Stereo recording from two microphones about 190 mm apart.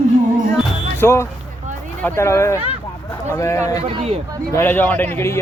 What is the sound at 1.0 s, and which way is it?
A man's voice, 15° left (ahead or behind).